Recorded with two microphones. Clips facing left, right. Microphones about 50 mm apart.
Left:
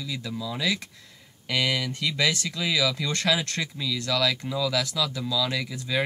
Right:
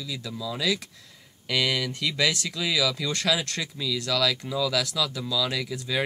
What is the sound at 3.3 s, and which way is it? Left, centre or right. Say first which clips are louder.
Speech: left 1 dB; centre.